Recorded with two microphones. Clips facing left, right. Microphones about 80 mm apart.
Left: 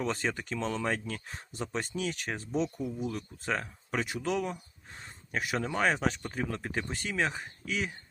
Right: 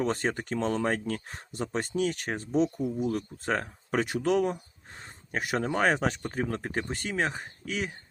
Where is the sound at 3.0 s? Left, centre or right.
Right.